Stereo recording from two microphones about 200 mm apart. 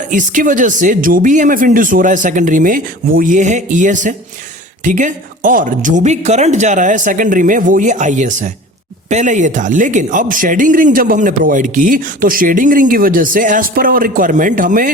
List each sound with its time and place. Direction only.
0.1 s a man's voice: 40° right (ahead or behind)